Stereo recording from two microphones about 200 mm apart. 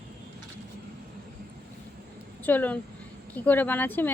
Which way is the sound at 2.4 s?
10° left (ahead or behind).